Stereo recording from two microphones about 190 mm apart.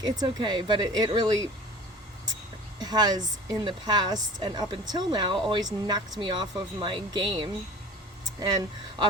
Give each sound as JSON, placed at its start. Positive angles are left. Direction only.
{"t": 0.0, "sound": "a woman's voice", "side_deg": -20}
{"t": 2.7, "sound": "a woman's voice", "side_deg": -20}